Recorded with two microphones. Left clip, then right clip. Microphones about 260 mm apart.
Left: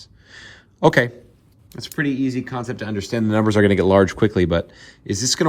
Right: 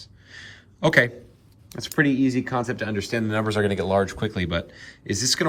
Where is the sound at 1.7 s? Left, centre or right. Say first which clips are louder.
Right 2 dB; centre.